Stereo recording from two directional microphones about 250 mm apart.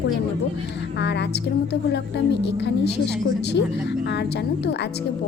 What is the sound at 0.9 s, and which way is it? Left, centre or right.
A woman's voice, left.